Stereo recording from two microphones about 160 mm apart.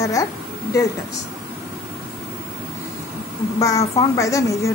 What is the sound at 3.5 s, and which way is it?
A woman's voice, 20° left (ahead or behind).